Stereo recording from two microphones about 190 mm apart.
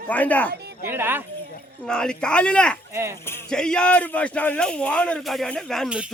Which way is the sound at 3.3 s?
10° left (ahead or behind).